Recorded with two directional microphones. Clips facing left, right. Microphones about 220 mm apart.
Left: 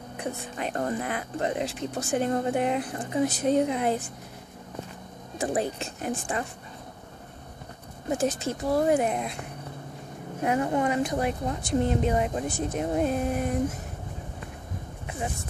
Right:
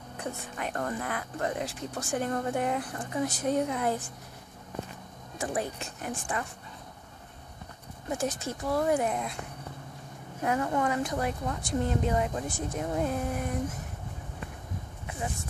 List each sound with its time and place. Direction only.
0.6 s speech: 25° left (ahead or behind)
5.4 s speech: 25° left (ahead or behind)
8.1 s speech: 25° left (ahead or behind)
10.4 s speech: 20° left (ahead or behind)